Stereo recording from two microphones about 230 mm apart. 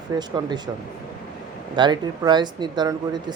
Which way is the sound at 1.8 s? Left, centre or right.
Centre.